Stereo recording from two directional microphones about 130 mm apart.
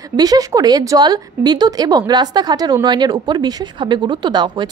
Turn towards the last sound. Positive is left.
turn(degrees=-35)  # may be behind; listen again after turning